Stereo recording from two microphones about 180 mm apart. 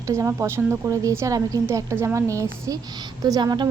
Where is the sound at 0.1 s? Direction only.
15° right (ahead or behind).